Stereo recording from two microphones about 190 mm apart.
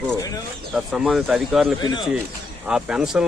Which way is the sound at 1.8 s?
25° left (ahead or behind).